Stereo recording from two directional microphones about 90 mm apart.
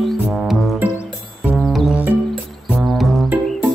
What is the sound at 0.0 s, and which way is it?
Music, centre (ahead or behind).